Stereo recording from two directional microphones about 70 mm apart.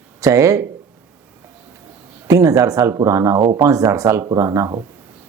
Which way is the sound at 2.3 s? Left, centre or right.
Right.